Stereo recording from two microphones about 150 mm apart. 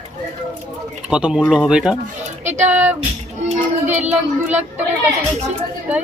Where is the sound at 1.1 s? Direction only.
5° right (ahead or behind).